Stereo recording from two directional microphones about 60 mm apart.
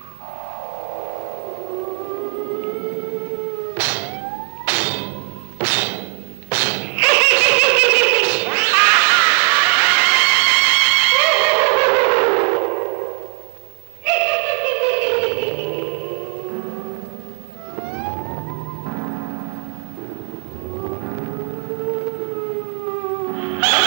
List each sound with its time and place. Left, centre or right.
0.7 s civil defense siren: right
5.6 s music: right
6.5 s a sound: right
17.7 s music: right
20.7 s siren: right